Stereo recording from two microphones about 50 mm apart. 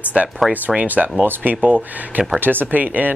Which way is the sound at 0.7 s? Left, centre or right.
Right.